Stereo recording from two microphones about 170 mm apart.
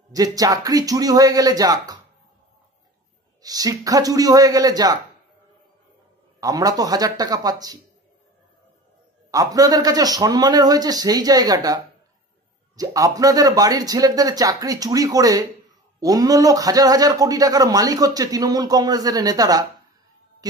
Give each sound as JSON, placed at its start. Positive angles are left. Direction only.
{"t": 0.1, "sound": "a man's voice", "side_deg": -20}
{"t": 3.4, "sound": "a man's voice", "side_deg": -20}
{"t": 6.4, "sound": "a man's voice", "side_deg": -20}
{"t": 9.3, "sound": "a man's voice", "side_deg": -20}